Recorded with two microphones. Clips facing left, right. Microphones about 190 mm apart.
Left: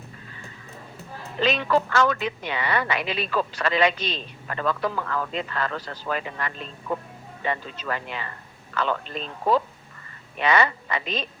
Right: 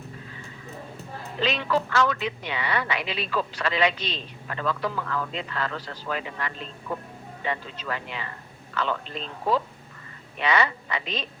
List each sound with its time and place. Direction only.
1.4 s speech: 50° left (ahead or behind)